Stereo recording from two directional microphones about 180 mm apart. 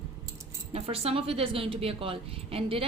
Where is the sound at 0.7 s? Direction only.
35° right (ahead or behind).